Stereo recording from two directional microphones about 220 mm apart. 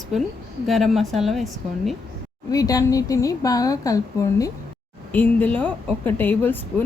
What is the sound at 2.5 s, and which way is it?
Speech, 15° left (ahead or behind).